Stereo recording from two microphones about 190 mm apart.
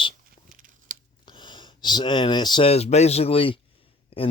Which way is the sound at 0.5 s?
45° right (ahead or behind).